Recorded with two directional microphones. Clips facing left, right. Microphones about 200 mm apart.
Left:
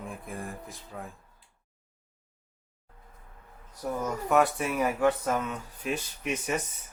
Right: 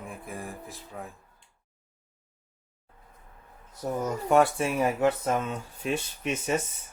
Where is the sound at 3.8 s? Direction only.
30° right (ahead or behind).